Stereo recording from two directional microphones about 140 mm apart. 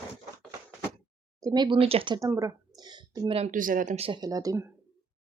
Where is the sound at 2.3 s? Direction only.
20° right (ahead or behind); by 3.5 s 40° right (ahead or behind).